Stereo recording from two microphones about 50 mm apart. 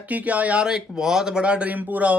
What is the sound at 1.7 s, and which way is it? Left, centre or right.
Speech, right.